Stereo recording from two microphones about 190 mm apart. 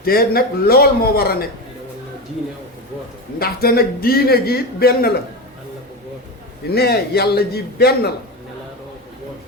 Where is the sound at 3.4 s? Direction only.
55° left (ahead or behind).